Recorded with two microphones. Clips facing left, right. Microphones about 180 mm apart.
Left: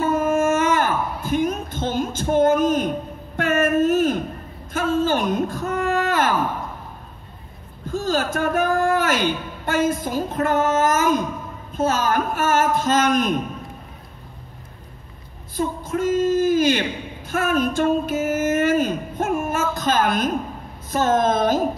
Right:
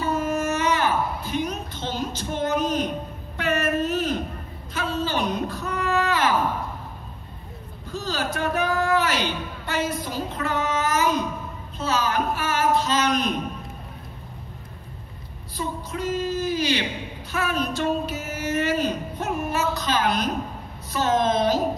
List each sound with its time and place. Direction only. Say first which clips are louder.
0.0 s a sound: left 5 dB; 50° left (ahead or behind)
3.3 s speech: left 5 dB; 50° left (ahead or behind)
7.9 s a man's voice: left 6 dB; 50° left (ahead or behind)
15.5 s speech: left 6 dB; 50° left (ahead or behind)